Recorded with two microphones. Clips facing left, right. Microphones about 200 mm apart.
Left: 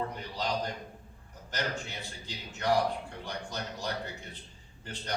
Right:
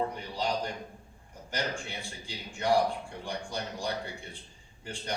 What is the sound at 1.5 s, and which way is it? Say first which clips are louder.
A man's voice: right 1 dB; 10° right (ahead or behind).